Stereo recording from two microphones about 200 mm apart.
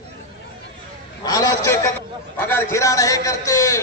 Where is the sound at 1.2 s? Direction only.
20° left (ahead or behind).